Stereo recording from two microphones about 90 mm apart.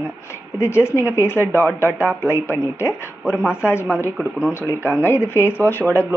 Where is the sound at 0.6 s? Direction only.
30° left (ahead or behind).